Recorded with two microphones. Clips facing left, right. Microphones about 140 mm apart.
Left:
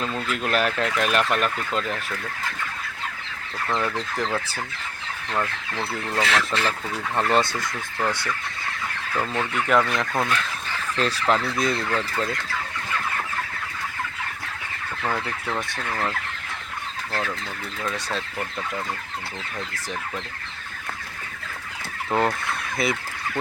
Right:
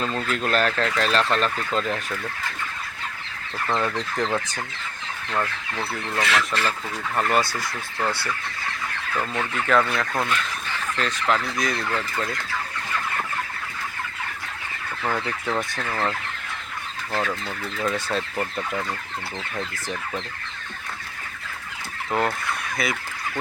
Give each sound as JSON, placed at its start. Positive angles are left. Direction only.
{"t": 0.3, "sound": "speech", "side_deg": 10}
{"t": 3.7, "sound": "speech", "side_deg": 0}
{"t": 6.3, "sound": "speech", "side_deg": 25}
{"t": 9.3, "sound": "speech", "side_deg": 15}
{"t": 10.1, "sound": "speech", "side_deg": 0}
{"t": 10.9, "sound": "fowl", "side_deg": 35}
{"t": 11.5, "sound": "speech", "side_deg": 25}
{"t": 11.9, "sound": "speech", "side_deg": 10}
{"t": 15.0, "sound": "speech", "side_deg": 0}
{"t": 18.1, "sound": "speech", "side_deg": -5}
{"t": 22.1, "sound": "speech", "side_deg": 0}
{"t": 22.8, "sound": "speech", "side_deg": 25}